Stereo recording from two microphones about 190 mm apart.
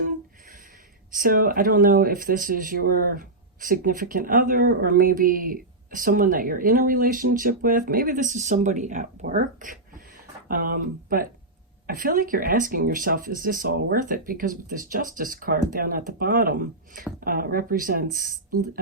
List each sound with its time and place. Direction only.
1.1 s speech: 45° right (ahead or behind)